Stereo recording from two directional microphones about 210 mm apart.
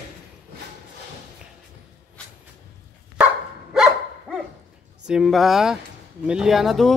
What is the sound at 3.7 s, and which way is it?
Dog, centre (ahead or behind).